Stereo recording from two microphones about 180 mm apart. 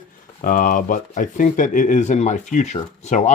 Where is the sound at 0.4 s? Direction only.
50° left (ahead or behind).